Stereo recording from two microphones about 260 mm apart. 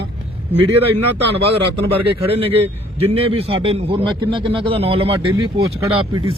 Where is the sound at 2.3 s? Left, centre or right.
Right.